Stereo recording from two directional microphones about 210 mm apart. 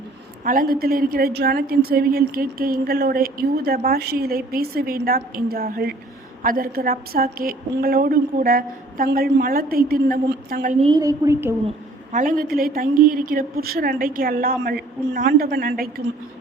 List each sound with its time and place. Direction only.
0.4 s a woman's voice: 40° right (ahead or behind)
10.8 s a woman's voice: 20° right (ahead or behind)
12.1 s a woman's voice: 40° right (ahead or behind)